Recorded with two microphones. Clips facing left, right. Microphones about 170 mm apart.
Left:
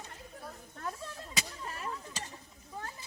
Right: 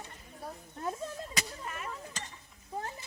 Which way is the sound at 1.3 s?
35° left (ahead or behind).